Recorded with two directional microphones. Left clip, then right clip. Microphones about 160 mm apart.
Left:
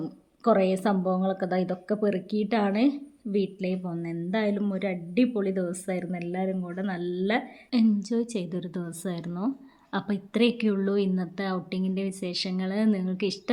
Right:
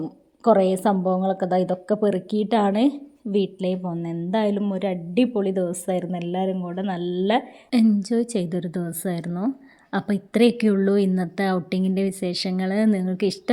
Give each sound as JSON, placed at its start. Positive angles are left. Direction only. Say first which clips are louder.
{"t": 0.0, "sound": "a woman's voice", "louder": "right 5 dB", "side_deg": -20}